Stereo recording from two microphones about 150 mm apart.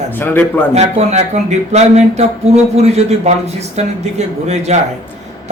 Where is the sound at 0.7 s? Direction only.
50° right (ahead or behind).